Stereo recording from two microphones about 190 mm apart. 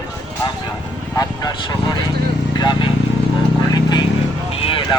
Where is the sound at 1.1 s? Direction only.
20° left (ahead or behind).